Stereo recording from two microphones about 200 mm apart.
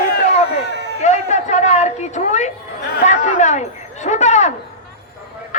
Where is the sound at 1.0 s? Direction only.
35° left (ahead or behind).